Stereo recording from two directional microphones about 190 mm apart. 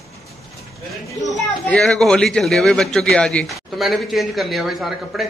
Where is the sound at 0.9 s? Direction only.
Centre (ahead or behind).